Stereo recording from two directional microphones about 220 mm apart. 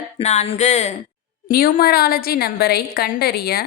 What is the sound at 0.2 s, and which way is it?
A woman's voice, 30° left (ahead or behind).